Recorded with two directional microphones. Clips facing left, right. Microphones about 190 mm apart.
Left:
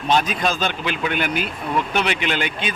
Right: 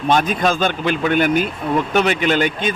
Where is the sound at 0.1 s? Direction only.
50° right (ahead or behind).